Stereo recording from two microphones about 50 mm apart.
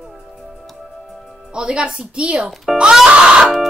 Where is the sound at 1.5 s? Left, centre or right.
Centre.